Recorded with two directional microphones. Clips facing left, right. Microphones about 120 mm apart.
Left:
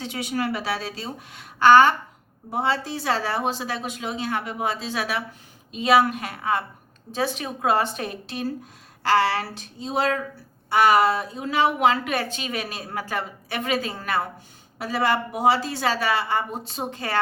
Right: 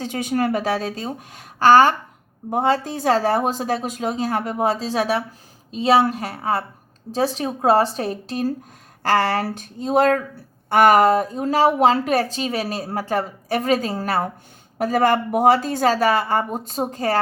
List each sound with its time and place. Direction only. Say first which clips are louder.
0.0 s a woman's voice: right 5 dB; 45° right (ahead or behind)